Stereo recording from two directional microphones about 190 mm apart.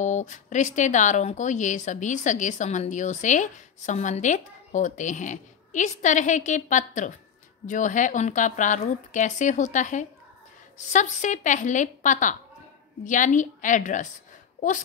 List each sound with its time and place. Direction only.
0.0 s speech: 40° left (ahead or behind)